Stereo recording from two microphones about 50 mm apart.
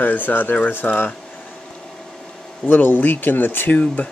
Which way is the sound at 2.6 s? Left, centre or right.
Left.